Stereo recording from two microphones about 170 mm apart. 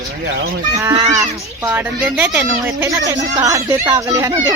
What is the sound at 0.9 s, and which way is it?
Speech, 20° right (ahead or behind).